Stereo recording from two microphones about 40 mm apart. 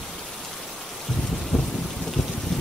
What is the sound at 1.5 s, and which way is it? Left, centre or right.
Thunder, left.